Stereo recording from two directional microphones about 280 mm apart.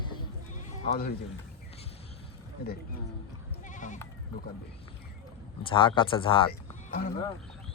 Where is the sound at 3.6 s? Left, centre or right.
Left.